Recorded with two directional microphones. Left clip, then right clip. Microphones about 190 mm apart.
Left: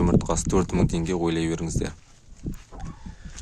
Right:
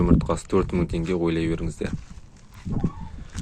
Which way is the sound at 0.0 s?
30° left (ahead or behind).